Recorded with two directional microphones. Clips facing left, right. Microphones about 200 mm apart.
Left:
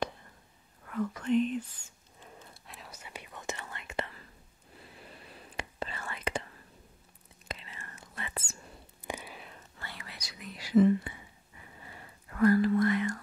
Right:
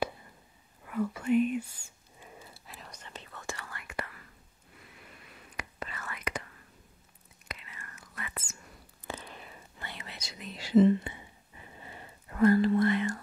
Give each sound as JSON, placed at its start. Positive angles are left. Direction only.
{"t": 0.8, "sound": "whispering", "side_deg": -10}
{"t": 9.0, "sound": "a sound", "side_deg": 10}
{"t": 9.6, "sound": "whispering", "side_deg": -20}